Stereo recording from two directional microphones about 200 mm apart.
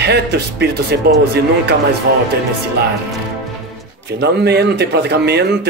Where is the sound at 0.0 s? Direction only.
55° right (ahead or behind).